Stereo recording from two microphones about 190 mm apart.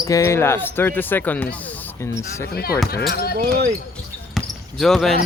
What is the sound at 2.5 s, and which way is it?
Speech, 55° left (ahead or behind).